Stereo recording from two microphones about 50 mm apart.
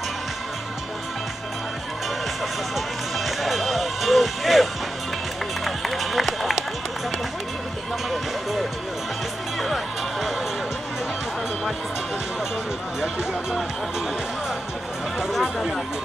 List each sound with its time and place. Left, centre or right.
3.3 s music: centre
5.6 s run: centre
15.4 s a sound: centre